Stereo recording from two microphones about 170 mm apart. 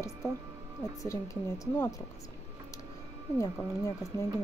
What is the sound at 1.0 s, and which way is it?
Speech, 20° left (ahead or behind).